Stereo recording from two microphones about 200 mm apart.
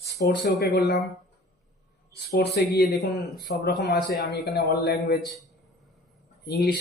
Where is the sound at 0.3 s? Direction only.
55° left (ahead or behind).